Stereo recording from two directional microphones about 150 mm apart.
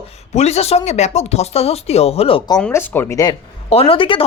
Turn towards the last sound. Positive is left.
turn(degrees=35)  # may be behind; listen again after turning